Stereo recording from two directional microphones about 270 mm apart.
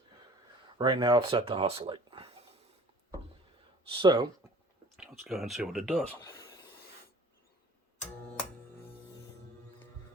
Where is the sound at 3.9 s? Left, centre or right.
Centre.